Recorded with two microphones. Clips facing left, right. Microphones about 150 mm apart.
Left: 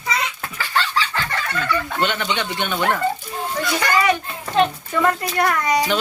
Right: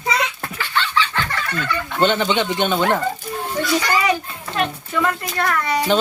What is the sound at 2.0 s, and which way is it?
Speech, 25° right (ahead or behind).